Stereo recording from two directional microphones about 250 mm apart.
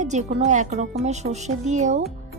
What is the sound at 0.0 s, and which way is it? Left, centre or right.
A woman's voice, right.